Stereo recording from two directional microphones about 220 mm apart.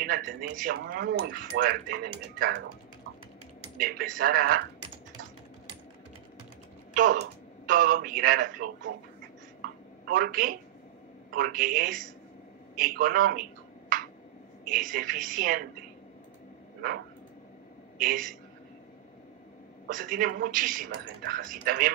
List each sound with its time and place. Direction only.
0.0 s speech: 40° right (ahead or behind)
3.7 s speech: 40° right (ahead or behind)
6.9 s speech: 40° right (ahead or behind)
9.6 s a sound: 40° right (ahead or behind)
11.2 s speech: 40° right (ahead or behind)
12.7 s a sound: 40° right (ahead or behind)
14.7 s speech: 40° right (ahead or behind)
17.9 s a woman's voice: 40° right (ahead or behind)
19.9 s speech: 40° right (ahead or behind)